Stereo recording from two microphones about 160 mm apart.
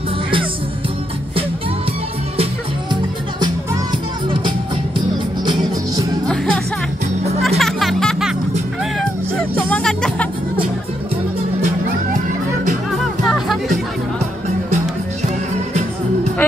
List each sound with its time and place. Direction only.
4.3 s music: 30° right (ahead or behind)
7.4 s music: centre (ahead or behind)
9.6 s music: 5° left (ahead or behind)
12.9 s music: centre (ahead or behind)